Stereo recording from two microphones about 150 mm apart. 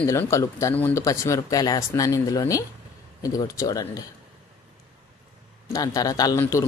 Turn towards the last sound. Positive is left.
turn(degrees=20)  # may be behind; listen again after turning